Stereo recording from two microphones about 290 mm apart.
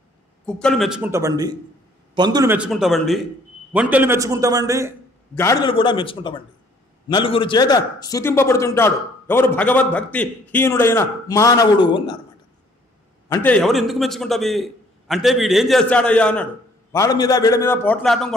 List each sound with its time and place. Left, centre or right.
0.5 s a man's voice: centre
5.3 s a man's voice: centre
13.3 s a man's voice: centre